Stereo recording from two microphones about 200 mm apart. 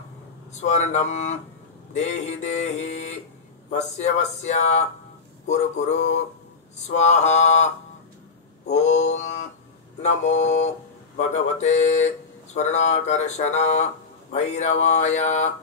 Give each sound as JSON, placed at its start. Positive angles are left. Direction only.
{"t": 0.6, "sound": "speech", "side_deg": 35}
{"t": 8.7, "sound": "speech", "side_deg": 35}